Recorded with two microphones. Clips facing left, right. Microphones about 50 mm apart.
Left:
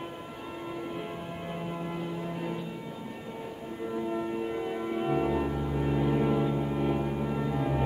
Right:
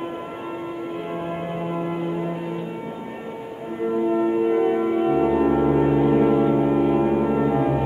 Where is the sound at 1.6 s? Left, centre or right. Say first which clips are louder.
Right 9 dB; right.